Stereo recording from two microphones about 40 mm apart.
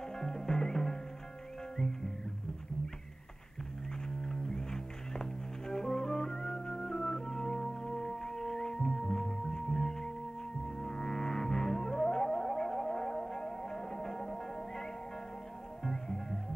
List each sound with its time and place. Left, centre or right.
0.1 s music: centre
4.2 s music: centre